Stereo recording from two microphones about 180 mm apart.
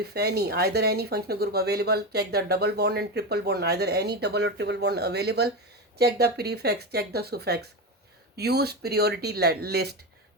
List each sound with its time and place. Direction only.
0.0 s speech: 60° right (ahead or behind)